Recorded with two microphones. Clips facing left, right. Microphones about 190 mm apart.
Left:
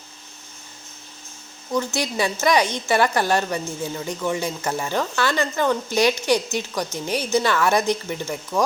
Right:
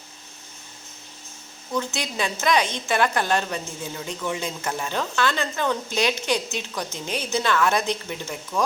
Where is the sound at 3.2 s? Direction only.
10° left (ahead or behind).